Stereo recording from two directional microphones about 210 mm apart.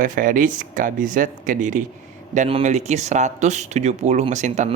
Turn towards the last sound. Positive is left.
turn(degrees=-35)  # may be behind; listen again after turning